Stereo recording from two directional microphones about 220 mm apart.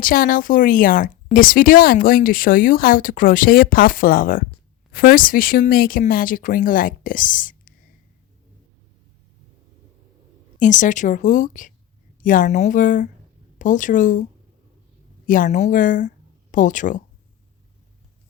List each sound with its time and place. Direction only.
0.0 s speech: 40° left (ahead or behind)
10.6 s speech: 35° left (ahead or behind)
15.3 s speech: 35° left (ahead or behind)